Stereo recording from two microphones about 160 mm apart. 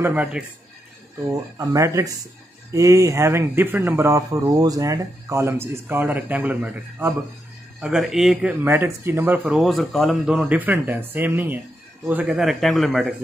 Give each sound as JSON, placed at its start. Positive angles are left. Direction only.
{"t": 0.0, "sound": "speech", "side_deg": -10}
{"t": 1.3, "sound": "a man's voice", "side_deg": -20}